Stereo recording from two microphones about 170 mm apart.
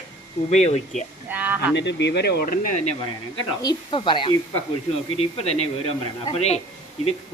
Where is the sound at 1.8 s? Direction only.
90° left; by 3.0 s 40° left (ahead or behind).